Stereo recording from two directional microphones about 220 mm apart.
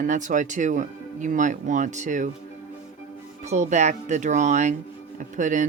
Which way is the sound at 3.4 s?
30° right (ahead or behind).